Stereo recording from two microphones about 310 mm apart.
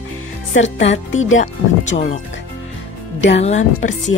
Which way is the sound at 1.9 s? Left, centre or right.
Left.